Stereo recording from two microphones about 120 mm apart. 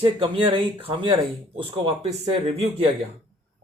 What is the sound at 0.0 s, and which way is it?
Speech, 45° right (ahead or behind).